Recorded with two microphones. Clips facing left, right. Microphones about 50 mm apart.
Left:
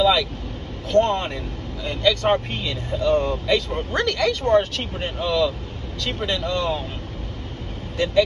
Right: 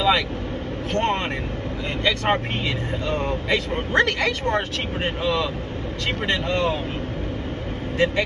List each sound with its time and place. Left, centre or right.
0.0 s speech: right
0.9 s speech: right